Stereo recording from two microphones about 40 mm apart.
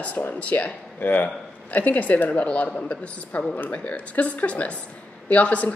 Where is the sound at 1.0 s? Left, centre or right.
Left.